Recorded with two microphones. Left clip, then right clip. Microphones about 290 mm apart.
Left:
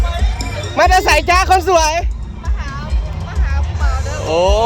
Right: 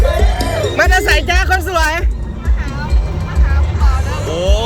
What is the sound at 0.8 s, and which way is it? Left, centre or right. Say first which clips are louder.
A man's voice: left 3 dB; centre.